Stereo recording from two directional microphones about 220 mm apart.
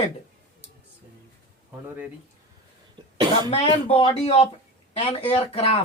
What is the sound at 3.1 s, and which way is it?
Cough, 20° right (ahead or behind).